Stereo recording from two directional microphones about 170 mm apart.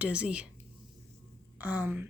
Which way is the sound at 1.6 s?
10° right (ahead or behind).